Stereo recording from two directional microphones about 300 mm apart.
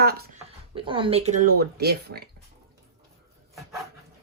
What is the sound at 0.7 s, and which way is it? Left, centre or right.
Speech, centre.